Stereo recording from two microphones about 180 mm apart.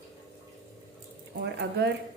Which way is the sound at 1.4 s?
70° right (ahead or behind).